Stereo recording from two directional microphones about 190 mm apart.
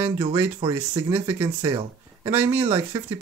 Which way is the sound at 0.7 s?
10° right (ahead or behind).